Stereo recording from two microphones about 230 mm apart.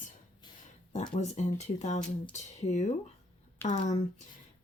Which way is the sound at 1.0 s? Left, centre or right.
Left.